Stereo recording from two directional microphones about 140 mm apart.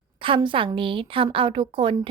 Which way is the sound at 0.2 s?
35° right (ahead or behind).